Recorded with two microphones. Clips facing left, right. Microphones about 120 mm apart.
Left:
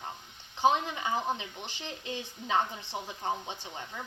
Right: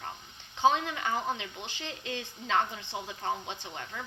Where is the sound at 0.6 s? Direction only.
15° left (ahead or behind).